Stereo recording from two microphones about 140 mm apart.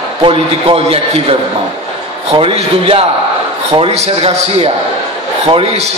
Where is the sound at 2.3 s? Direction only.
40° right (ahead or behind).